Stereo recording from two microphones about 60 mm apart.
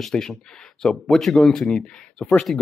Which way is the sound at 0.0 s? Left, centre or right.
Centre.